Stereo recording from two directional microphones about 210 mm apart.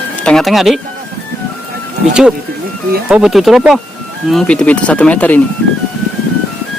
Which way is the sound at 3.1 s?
Centre (ahead or behind).